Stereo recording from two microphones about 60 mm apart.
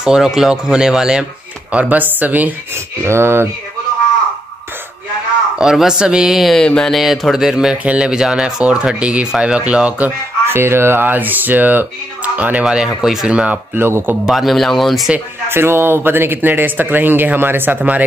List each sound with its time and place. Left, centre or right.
0.0 s speech: centre
1.7 s speech: right
3.0 s speech: right
5.6 s speech: centre
6.5 s a sound: centre
6.9 s speech: centre; by 10.1 s right
10.5 s speech: right
12.6 s speech: centre
13.3 s speech: centre
13.7 s speech: right
14.2 s speech: centre
15.4 s speech: right